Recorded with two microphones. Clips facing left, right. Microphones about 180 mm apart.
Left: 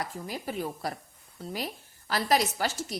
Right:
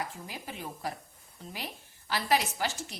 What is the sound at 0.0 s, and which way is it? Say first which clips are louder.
A woman's voice: left 4 dB; 40° left (ahead or behind).